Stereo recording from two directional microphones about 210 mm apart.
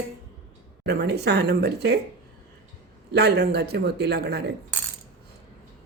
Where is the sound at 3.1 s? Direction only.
50° right (ahead or behind).